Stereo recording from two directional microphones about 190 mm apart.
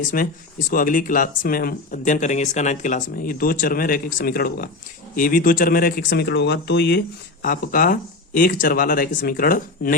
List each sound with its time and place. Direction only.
0.1 s speech: 50° left (ahead or behind)
7.4 s speech: 45° left (ahead or behind)